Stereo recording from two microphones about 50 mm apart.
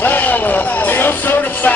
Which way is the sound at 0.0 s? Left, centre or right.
Left.